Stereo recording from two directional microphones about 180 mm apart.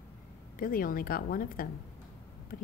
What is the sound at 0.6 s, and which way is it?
Speech, 50° left (ahead or behind).